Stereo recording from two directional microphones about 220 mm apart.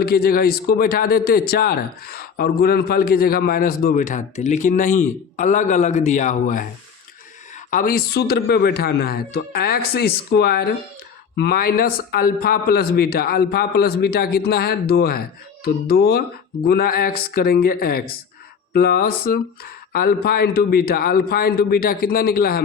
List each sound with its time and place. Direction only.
0.0 s a man's voice: 45° left (ahead or behind)
7.7 s a man's voice: 40° left (ahead or behind)